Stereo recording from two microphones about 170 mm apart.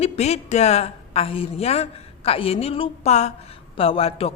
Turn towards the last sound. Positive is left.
turn(degrees=35)  # may be behind; listen again after turning